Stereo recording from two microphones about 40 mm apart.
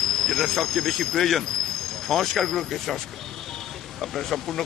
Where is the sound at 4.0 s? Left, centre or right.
Centre.